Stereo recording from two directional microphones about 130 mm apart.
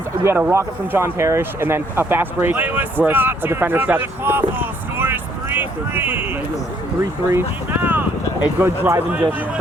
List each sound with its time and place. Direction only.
0.3 s speech: 15° right (ahead or behind)
7.3 s speech: 15° right (ahead or behind)